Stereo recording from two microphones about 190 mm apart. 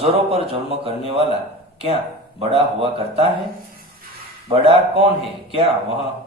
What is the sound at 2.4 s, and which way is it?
Speech, 30° right (ahead or behind).